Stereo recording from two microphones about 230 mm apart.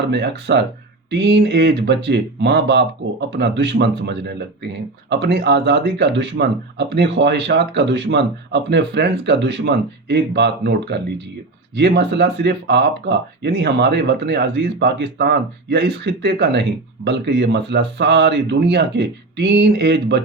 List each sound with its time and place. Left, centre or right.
0.1 s speech: right